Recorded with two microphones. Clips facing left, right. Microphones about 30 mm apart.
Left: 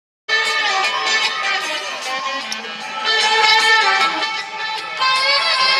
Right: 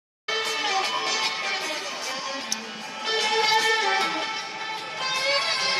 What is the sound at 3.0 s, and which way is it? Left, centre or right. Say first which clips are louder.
Music: left 9 dB; left.